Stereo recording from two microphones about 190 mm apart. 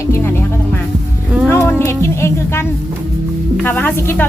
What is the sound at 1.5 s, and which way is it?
A woman's voice, 15° left (ahead or behind).